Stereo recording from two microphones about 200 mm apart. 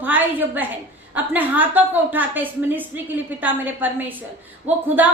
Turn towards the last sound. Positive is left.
turn(degrees=-10)  # may be behind; listen again after turning